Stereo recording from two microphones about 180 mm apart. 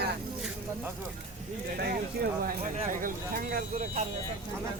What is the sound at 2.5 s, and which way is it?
Speech, 50° right (ahead or behind).